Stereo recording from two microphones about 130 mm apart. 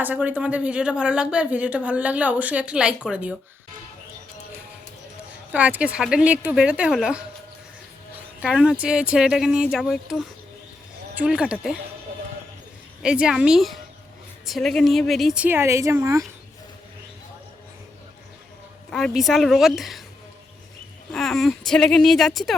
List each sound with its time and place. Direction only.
0.0 s speech: 10° right (ahead or behind)
5.5 s speech: 10° right (ahead or behind)
8.4 s a woman's voice: 5° right (ahead or behind)
13.0 s a woman's voice: 5° right (ahead or behind)
15.4 s a woman's voice: 20° right (ahead or behind)
18.9 s a woman's voice: 5° left (ahead or behind)
21.1 s a woman's voice: centre (ahead or behind)